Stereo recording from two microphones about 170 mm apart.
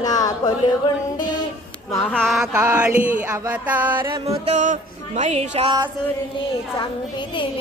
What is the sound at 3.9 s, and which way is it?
Speech, 25° right (ahead or behind).